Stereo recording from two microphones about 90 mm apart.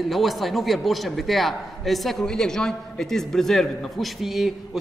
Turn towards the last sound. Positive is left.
turn(degrees=-5)  # may be behind; listen again after turning